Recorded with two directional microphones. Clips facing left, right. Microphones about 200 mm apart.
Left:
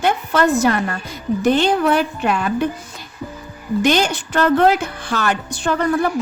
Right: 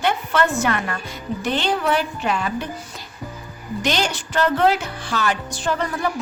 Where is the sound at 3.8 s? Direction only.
50° left (ahead or behind).